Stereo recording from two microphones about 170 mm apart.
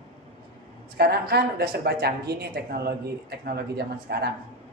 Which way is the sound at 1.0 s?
70° right (ahead or behind).